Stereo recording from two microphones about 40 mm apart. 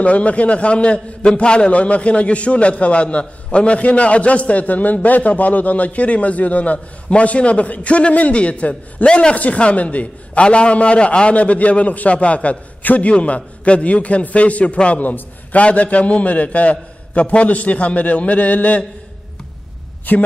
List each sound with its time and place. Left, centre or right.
0.0 s a man's voice: left
13.1 s a man's voice: left
20.1 s a woman's voice: left